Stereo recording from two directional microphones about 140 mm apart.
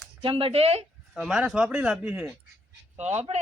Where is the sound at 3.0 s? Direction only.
55° right (ahead or behind).